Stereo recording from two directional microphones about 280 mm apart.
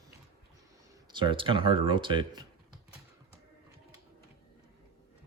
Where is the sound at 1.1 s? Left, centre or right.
Centre.